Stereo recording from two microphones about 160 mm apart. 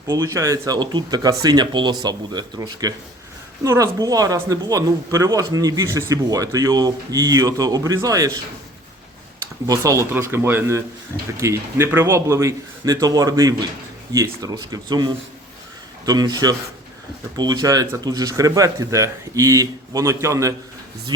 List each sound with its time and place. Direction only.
0.1 s speech: 20° right (ahead or behind)
9.6 s speech: 20° right (ahead or behind)